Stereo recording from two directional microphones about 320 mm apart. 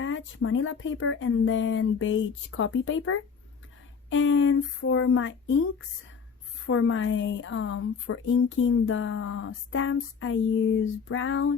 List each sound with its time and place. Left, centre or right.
0.0 s a woman's voice: left